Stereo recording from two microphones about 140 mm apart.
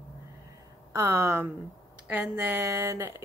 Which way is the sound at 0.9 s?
20° right (ahead or behind).